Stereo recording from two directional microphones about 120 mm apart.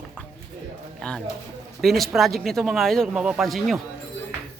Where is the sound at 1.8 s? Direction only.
Centre (ahead or behind).